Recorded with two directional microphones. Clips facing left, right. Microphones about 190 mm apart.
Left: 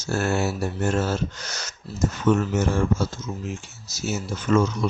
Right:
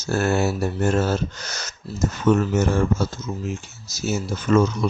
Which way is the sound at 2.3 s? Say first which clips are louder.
Right 3 dB; 40° right (ahead or behind).